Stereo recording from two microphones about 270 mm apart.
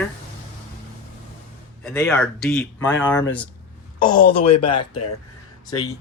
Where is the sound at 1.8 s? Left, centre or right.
Centre.